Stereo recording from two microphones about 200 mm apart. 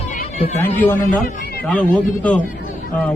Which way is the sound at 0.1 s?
35° left (ahead or behind).